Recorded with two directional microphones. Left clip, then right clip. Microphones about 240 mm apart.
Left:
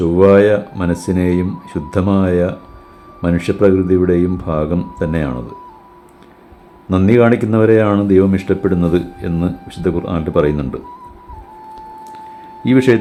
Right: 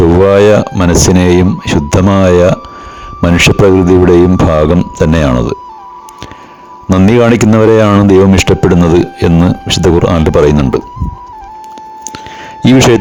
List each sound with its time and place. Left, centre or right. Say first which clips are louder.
0.2 s speech: right 1 dB; right
6.9 s speech: right 4 dB; right
12.6 s speech: right 6 dB; right